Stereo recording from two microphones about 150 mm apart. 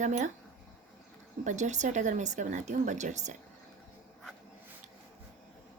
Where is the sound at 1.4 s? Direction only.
55° right (ahead or behind).